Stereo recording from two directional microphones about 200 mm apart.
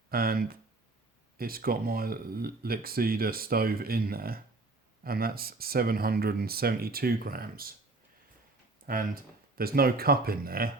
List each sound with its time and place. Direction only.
0.1 s speech: 50° right (ahead or behind)
8.9 s speech: 45° right (ahead or behind)